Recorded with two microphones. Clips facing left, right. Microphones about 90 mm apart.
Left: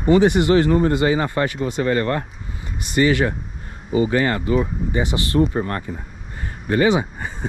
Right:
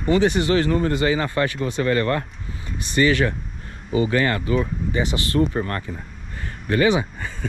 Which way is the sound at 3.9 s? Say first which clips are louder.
Left 2 dB; 30° left (ahead or behind).